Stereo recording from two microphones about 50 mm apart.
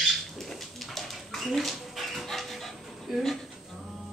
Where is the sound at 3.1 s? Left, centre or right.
Centre.